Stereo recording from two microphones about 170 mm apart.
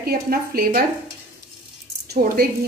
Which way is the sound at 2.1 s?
60° right (ahead or behind).